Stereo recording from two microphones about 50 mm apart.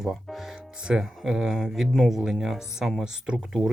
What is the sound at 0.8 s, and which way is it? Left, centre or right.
Speech, centre.